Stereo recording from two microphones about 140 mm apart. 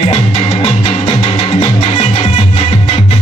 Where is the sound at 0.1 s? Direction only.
45° left (ahead or behind).